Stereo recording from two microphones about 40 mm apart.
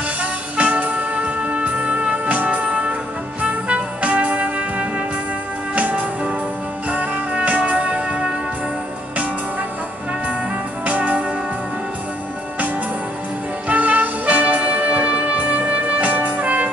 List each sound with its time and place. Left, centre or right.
0.2 s music: right
3.4 s trumpet: right
5.8 s music: right
10.9 s music: right
13.7 s music: right